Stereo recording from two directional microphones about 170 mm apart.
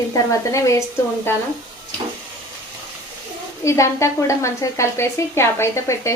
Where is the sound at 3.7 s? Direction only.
15° left (ahead or behind).